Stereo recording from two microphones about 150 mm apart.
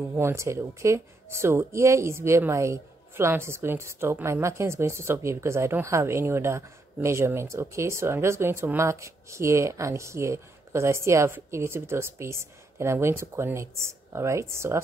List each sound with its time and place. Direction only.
0.1 s speech: 20° right (ahead or behind)